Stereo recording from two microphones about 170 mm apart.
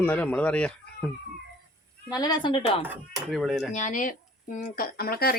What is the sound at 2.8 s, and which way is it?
Speech, 10° right (ahead or behind).